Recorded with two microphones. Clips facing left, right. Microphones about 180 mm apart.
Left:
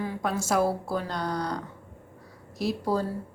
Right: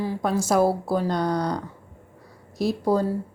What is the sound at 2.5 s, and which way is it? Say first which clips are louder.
Speech: right 5 dB; 45° right (ahead or behind).